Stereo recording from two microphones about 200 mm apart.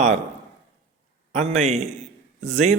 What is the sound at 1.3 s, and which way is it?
A man's voice, 35° right (ahead or behind).